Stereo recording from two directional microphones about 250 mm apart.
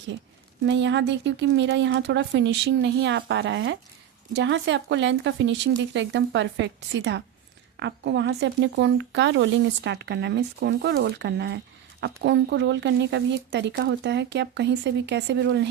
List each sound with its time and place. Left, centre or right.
0.6 s speech: right